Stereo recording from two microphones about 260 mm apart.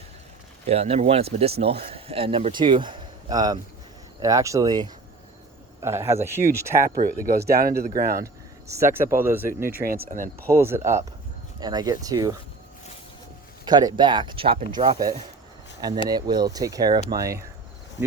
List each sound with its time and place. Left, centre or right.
0.7 s speech: right
7.0 s speech: right
8.2 s speech: centre
9.8 s speech: right
10.5 s speech: centre
13.7 s speech: centre